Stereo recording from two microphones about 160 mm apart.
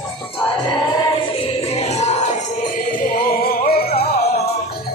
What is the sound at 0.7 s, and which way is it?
Music, 30° left (ahead or behind).